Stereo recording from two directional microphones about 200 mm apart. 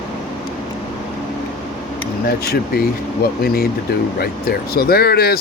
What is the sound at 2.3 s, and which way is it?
Speech, 50° left (ahead or behind).